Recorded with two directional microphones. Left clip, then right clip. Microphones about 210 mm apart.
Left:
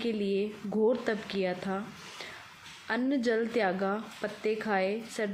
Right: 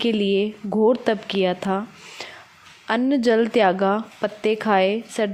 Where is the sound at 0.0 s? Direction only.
35° right (ahead or behind).